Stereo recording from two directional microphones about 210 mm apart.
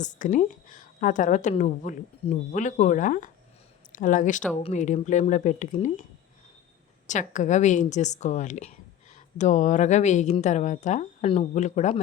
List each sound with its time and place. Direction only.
0.0 s a woman's voice: 35° left (ahead or behind)
7.1 s a woman's voice: 35° left (ahead or behind)